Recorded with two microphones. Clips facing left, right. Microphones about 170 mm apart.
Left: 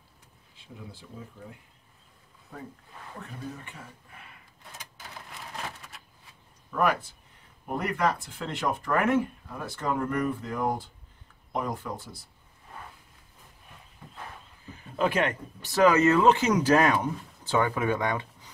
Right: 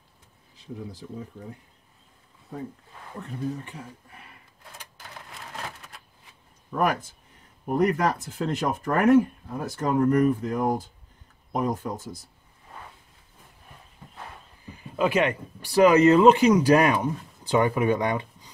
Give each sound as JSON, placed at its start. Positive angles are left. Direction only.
{"t": 6.8, "sound": "speech", "side_deg": -45}
{"t": 14.8, "sound": "speech", "side_deg": -10}